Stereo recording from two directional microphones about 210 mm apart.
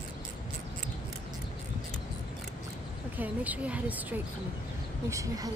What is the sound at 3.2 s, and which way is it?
Speech, 5° right (ahead or behind).